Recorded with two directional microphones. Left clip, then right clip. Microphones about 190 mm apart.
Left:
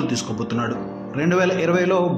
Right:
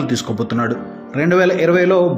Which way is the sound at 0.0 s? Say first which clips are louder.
Right 4 dB; 25° right (ahead or behind).